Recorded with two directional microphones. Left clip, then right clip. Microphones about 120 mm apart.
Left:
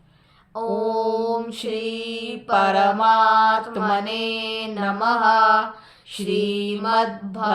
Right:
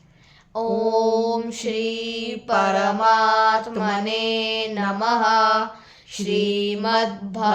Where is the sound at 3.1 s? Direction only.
35° right (ahead or behind).